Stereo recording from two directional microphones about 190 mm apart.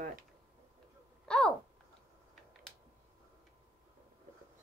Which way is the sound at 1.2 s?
5° left (ahead or behind).